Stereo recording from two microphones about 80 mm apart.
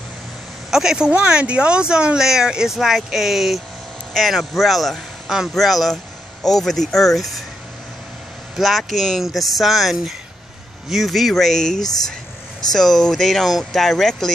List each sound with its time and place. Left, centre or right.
0.7 s a man's voice: centre
8.5 s speech: centre
11.8 s speech: left
12.7 s speech: centre